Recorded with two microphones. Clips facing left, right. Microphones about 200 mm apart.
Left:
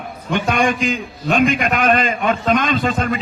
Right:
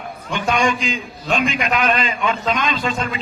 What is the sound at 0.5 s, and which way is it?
A man's voice, 50° left (ahead or behind).